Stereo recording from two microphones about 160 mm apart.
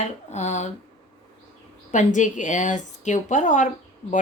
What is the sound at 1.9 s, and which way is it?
Speech, 50° left (ahead or behind).